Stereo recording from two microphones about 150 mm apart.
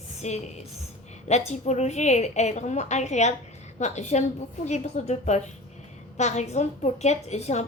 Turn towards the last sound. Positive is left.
turn(degrees=45)  # may be behind; listen again after turning